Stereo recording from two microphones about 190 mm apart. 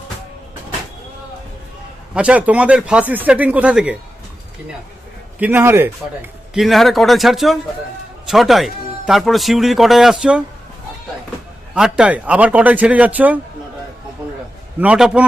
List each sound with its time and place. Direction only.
2.1 s speech: 5° right (ahead or behind)
5.4 s speech: 10° right (ahead or behind)
6.5 s speech: centre (ahead or behind)
11.7 s speech: 5° right (ahead or behind)
14.8 s speech: 5° right (ahead or behind)